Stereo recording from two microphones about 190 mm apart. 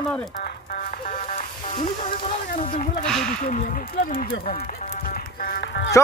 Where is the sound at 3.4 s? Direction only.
45° left (ahead or behind).